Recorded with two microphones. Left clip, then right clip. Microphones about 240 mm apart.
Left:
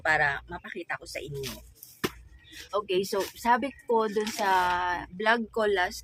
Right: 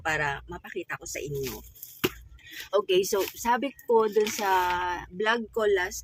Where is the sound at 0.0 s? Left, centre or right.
Centre.